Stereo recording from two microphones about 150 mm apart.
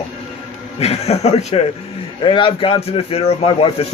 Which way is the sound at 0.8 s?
45° left (ahead or behind).